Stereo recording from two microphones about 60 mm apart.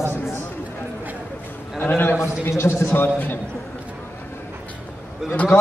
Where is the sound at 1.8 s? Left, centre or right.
Left.